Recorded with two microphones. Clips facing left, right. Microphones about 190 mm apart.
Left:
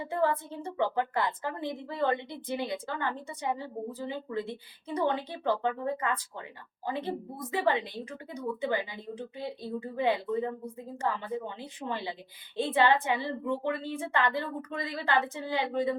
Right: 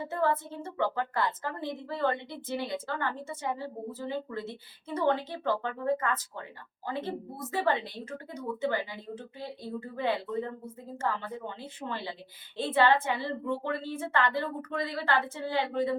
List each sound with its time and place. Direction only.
0.0 s a woman's voice: 15° left (ahead or behind)